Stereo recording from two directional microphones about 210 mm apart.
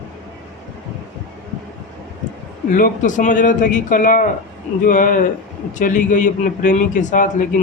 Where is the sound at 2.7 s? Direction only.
40° left (ahead or behind).